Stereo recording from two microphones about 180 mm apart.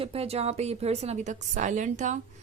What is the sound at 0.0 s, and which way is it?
A woman's voice, 35° right (ahead or behind).